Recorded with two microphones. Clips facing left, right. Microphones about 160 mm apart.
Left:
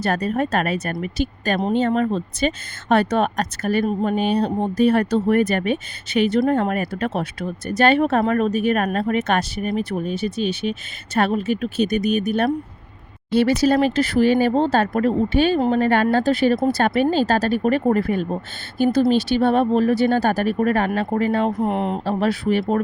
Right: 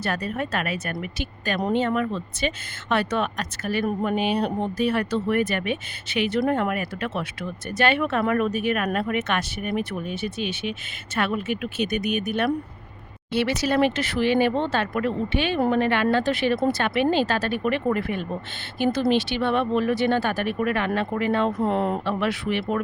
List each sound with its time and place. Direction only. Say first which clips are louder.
0.0 s speech: left 6 dB; 40° left (ahead or behind)
21.6 s speech: left 1 dB; 20° left (ahead or behind)
22.0 s speech: left 5 dB; 35° left (ahead or behind)